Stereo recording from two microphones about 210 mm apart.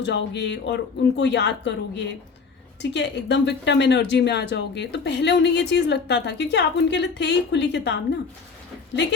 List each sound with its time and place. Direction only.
0.0 s speech: 55° left (ahead or behind)